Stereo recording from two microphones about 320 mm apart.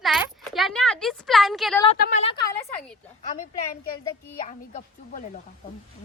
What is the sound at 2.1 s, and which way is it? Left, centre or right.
Speech, centre.